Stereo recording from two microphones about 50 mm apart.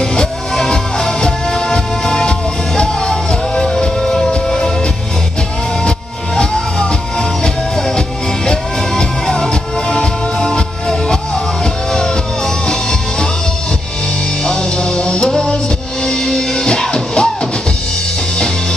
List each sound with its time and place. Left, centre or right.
0.1 s music: centre
5.9 s music: centre
8.5 s music: centre
14.4 s music: centre